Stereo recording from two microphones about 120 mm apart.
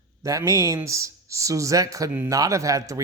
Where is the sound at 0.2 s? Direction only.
25° right (ahead or behind).